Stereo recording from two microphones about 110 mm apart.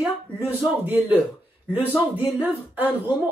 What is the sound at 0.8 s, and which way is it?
Speech, 15° right (ahead or behind).